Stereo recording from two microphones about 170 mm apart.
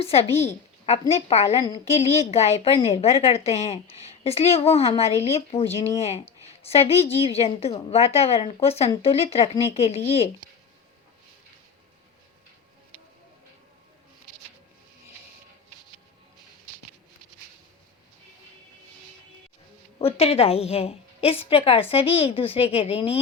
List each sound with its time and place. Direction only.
0.0 s a woman's voice: 35° left (ahead or behind)
20.0 s a woman's voice: 35° left (ahead or behind)